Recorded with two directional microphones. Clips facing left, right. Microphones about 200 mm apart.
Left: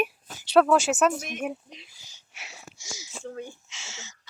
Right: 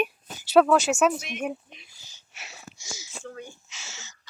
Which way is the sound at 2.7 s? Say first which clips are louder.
Even; 15° left (ahead or behind).